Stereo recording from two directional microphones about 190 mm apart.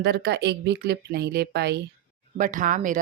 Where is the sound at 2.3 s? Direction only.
45° right (ahead or behind).